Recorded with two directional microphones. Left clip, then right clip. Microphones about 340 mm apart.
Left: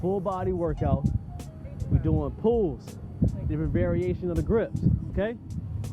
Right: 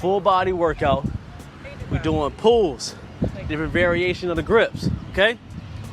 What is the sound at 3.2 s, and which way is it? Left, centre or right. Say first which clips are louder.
Speech: right 6 dB; centre.